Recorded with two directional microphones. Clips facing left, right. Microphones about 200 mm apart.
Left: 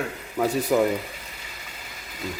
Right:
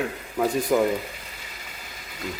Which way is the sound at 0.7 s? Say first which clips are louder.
Even; 5° left (ahead or behind).